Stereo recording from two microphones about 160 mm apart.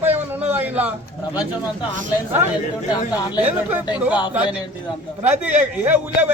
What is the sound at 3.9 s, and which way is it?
Speech, 10° right (ahead or behind).